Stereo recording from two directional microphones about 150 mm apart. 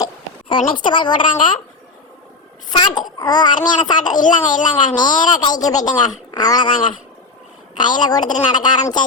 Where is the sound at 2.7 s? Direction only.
30° left (ahead or behind).